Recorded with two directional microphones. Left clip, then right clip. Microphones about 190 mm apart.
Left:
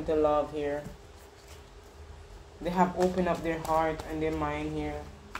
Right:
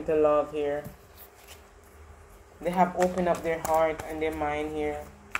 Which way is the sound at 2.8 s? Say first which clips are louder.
Right 2 dB; 10° right (ahead or behind).